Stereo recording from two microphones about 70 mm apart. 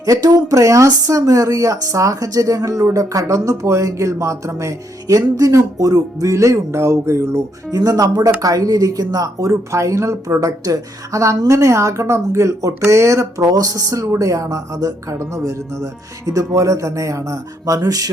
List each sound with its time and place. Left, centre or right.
0.0 s speech: right
7.7 s speech: right